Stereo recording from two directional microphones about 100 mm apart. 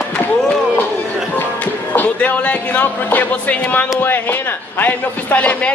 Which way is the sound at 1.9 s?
15° left (ahead or behind).